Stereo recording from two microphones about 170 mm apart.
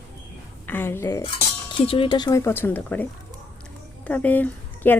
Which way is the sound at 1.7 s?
30° left (ahead or behind).